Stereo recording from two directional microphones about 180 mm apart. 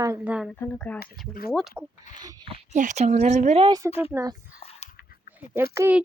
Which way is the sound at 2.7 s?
40° right (ahead or behind).